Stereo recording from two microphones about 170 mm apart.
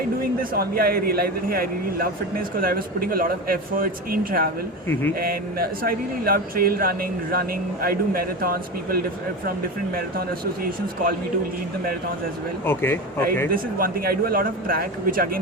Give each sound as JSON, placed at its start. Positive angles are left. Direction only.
{"t": 0.5, "sound": "speech", "side_deg": -60}
{"t": 12.6, "sound": "speech", "side_deg": 15}
{"t": 13.5, "sound": "speech", "side_deg": -60}